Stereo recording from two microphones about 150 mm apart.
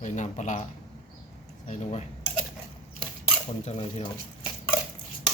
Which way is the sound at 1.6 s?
50° left (ahead or behind).